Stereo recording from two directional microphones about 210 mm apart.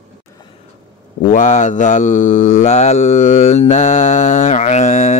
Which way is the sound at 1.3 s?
35° left (ahead or behind).